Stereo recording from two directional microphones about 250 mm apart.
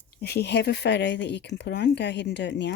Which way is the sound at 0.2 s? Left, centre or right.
Left.